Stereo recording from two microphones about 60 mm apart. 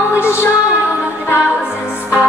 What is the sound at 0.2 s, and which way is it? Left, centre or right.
Music, left.